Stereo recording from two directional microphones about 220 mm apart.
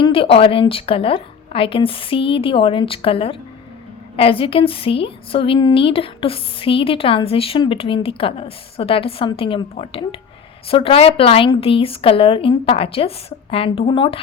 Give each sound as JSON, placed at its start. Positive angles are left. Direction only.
{"t": 0.0, "sound": "a woman's voice", "side_deg": 25}